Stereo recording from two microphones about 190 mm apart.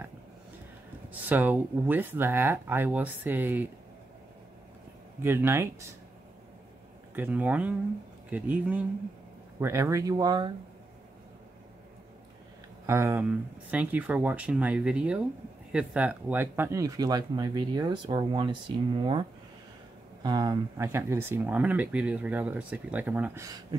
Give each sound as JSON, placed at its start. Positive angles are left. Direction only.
{"t": 1.3, "sound": "speech", "side_deg": -10}
{"t": 5.2, "sound": "speech", "side_deg": -10}
{"t": 7.2, "sound": "speech", "side_deg": -10}
{"t": 12.8, "sound": "speech", "side_deg": -15}
{"t": 20.2, "sound": "speech", "side_deg": -20}